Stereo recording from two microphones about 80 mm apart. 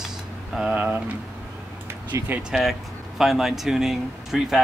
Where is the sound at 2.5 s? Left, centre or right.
Centre.